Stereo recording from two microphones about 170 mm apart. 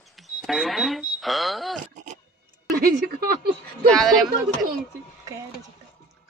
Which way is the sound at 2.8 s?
60° right (ahead or behind).